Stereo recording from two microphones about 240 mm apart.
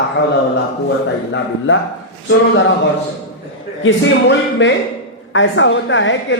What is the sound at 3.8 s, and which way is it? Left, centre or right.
Speech, left.